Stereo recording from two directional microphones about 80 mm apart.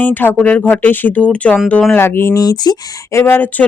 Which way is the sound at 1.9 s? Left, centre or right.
Left.